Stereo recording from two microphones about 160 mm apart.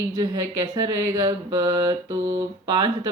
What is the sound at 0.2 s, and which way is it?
Speech, 25° right (ahead or behind).